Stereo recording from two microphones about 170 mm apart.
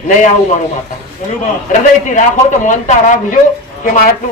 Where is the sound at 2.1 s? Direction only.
45° left (ahead or behind).